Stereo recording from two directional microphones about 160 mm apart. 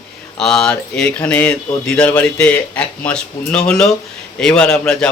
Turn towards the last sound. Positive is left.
turn(degrees=5)  # may be behind; listen again after turning